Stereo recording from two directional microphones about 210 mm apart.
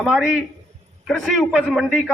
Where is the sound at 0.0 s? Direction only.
5° right (ahead or behind).